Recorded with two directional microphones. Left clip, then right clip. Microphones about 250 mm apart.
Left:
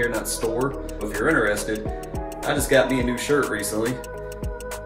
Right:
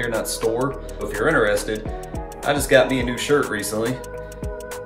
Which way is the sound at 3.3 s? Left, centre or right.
Centre.